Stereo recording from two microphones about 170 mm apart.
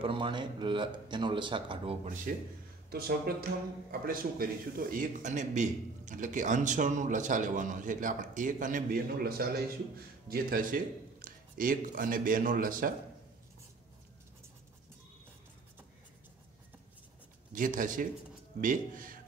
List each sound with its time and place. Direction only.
0.0 s speech: 30° right (ahead or behind)
2.3 s a man's voice: 55° right (ahead or behind)
17.5 s a man's voice: 50° right (ahead or behind)